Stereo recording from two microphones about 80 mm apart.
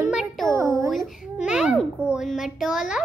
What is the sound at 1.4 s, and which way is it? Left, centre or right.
A child's voice, centre.